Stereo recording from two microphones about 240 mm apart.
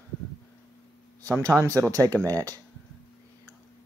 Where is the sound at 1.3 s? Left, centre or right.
Centre.